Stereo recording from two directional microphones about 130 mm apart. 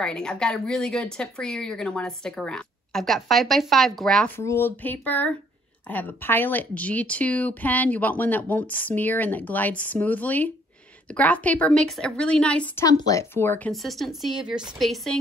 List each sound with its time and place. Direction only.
0.0 s speech: 5° left (ahead or behind)
4.4 s speech: 20° left (ahead or behind)
13.0 s speech: 25° left (ahead or behind)
13.7 s speech: centre (ahead or behind)